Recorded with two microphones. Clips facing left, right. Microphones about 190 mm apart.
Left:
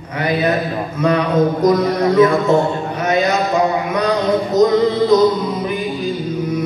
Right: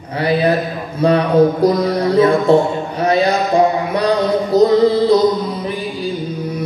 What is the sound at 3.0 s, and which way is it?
Mantra, 30° right (ahead or behind).